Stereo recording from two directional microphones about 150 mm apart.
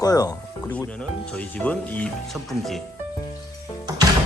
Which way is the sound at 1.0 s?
10° left (ahead or behind).